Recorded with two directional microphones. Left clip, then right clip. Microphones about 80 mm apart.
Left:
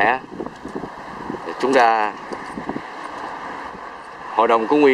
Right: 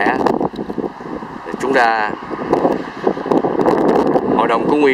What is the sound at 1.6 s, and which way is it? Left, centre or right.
Speech, centre.